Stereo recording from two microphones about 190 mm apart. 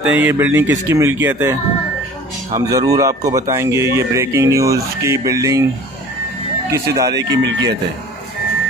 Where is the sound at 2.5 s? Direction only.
20° right (ahead or behind).